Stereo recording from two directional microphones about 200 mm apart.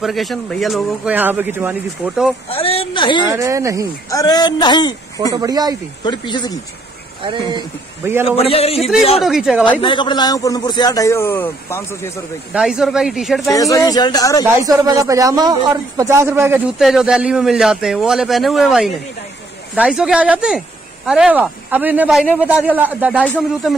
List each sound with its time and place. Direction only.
0.0 s a man's voice: centre (ahead or behind)
2.5 s speech: 30° left (ahead or behind)
3.3 s speech: 15° right (ahead or behind)
4.1 s a man's voice: 20° left (ahead or behind)
5.3 s speech: 20° right (ahead or behind)
6.0 s a man's voice: 20° left (ahead or behind)
7.2 s speech: 20° right (ahead or behind)
8.4 s a man's voice: 30° left (ahead or behind)
9.2 s a man's voice: centre (ahead or behind)
9.7 s a man's voice: 25° left (ahead or behind)
12.5 s a man's voice: 5° right (ahead or behind)
13.5 s a man's voice: 15° left (ahead or behind)
14.4 s a man's voice: 20° right (ahead or behind)
23.2 s a man's voice: 5° left (ahead or behind)